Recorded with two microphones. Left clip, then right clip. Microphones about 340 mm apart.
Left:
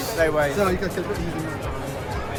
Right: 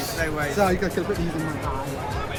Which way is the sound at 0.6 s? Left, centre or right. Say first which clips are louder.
Right 1 dB; centre.